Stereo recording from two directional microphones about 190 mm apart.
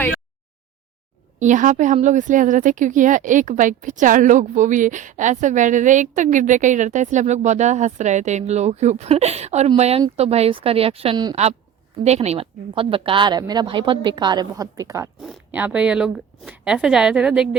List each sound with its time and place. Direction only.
1.4 s speech: 40° right (ahead or behind); by 11.3 s 25° right (ahead or behind)
12.0 s speech: 35° right (ahead or behind); by 15.1 s 15° right (ahead or behind)
15.2 s a woman's voice: 5° right (ahead or behind)